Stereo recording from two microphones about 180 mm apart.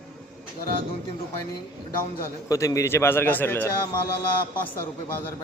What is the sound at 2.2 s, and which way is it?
A man's voice, 15° left (ahead or behind).